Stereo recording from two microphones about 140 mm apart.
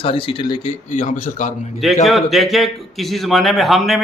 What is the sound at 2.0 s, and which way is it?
Speech, centre (ahead or behind).